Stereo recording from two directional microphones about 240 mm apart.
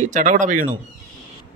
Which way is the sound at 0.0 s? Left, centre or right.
Right.